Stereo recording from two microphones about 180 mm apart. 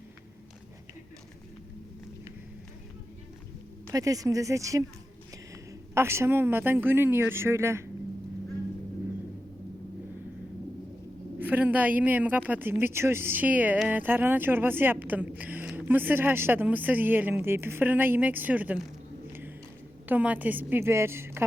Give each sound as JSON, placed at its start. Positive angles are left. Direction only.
{"t": 3.9, "sound": "speech", "side_deg": -20}
{"t": 5.9, "sound": "speech", "side_deg": -15}
{"t": 11.3, "sound": "speech", "side_deg": -10}
{"t": 20.1, "sound": "speech", "side_deg": -10}